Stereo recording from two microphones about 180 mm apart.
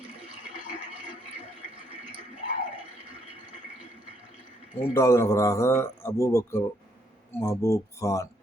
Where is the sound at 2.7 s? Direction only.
30° right (ahead or behind).